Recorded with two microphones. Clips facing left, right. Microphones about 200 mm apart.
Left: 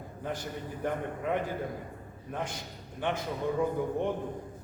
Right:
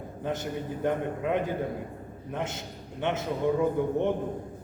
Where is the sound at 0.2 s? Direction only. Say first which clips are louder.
Right 5 dB; 20° right (ahead or behind).